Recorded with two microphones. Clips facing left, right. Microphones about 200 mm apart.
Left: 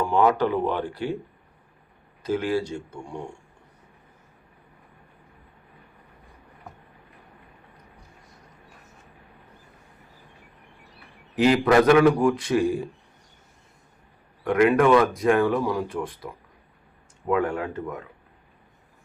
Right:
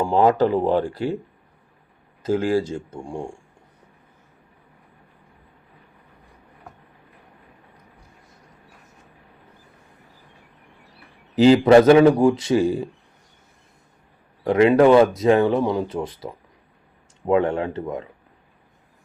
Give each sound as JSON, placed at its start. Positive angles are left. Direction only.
{"t": 0.0, "sound": "speech", "side_deg": -35}
{"t": 2.2, "sound": "speech", "side_deg": -45}
{"t": 3.1, "sound": "speech", "side_deg": -30}
{"t": 11.3, "sound": "speech", "side_deg": -30}
{"t": 14.4, "sound": "speech", "side_deg": -25}
{"t": 17.2, "sound": "speech", "side_deg": -25}